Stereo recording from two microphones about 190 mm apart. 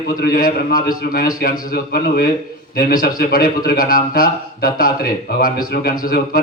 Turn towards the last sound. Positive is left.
turn(degrees=50)  # may be behind; listen again after turning